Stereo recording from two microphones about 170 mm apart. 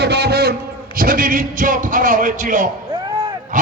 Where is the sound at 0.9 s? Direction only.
55° right (ahead or behind).